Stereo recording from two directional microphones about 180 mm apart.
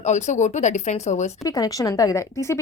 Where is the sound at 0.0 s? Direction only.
40° left (ahead or behind).